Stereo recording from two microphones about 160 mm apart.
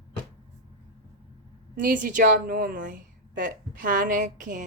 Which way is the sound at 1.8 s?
55° right (ahead or behind).